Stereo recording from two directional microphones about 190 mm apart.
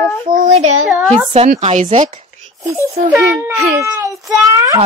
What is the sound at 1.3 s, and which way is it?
Speech, 40° right (ahead or behind).